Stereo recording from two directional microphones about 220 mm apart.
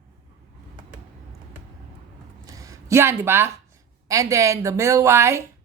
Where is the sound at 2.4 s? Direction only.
15° right (ahead or behind).